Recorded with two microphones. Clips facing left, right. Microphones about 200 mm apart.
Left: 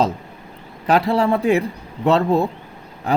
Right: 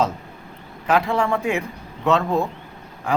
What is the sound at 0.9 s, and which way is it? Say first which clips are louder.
A man's voice: left 3 dB; 35° left (ahead or behind).